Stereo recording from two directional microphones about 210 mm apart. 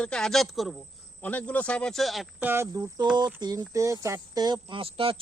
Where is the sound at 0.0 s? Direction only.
5° left (ahead or behind).